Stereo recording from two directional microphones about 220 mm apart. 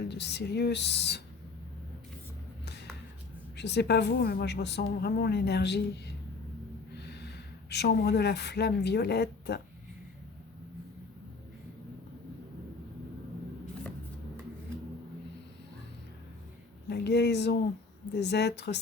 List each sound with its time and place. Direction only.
0.0 s a woman's voice: 50° left (ahead or behind)
3.6 s a woman's voice: 50° left (ahead or behind)
16.9 s a woman's voice: 50° left (ahead or behind)